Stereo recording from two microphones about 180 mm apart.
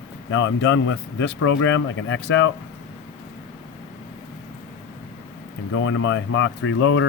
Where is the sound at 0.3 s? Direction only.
90° left.